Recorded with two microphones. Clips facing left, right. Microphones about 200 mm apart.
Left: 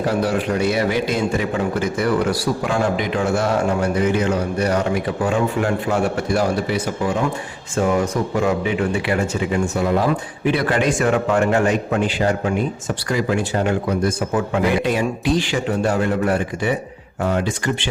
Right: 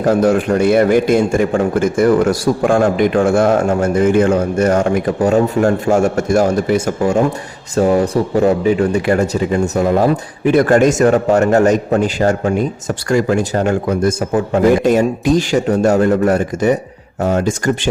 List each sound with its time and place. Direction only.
0.0 s a man's voice: 45° right (ahead or behind)
7.8 s a man's voice: 35° right (ahead or behind)